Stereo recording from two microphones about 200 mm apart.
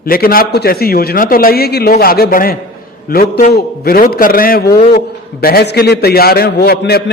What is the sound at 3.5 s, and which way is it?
A man's voice, 50° left (ahead or behind).